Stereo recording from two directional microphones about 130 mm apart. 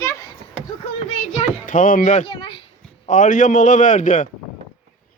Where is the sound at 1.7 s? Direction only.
90° left.